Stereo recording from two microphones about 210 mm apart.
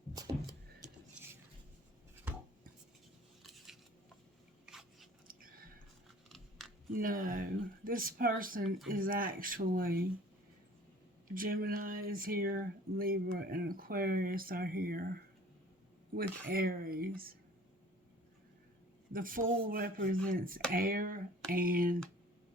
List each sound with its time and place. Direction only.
0.2 s music: 20° right (ahead or behind)
0.8 s a sound: 10° right (ahead or behind)
3.4 s scissors: centre (ahead or behind)
4.6 s a sound: centre (ahead or behind)
5.3 s a sound: 45° right (ahead or behind)
6.2 s biting: centre (ahead or behind)
6.9 s speech: 40° right (ahead or behind)
11.3 s speech: 45° right (ahead or behind)
19.1 s speech: 40° right (ahead or behind)